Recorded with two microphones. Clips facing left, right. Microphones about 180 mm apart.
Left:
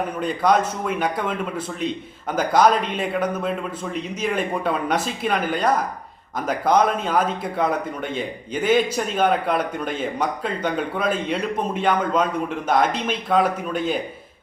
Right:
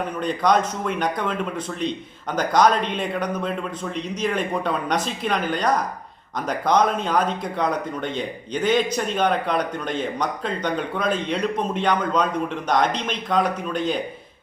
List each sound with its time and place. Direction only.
0.2 s a man's voice: 5° left (ahead or behind)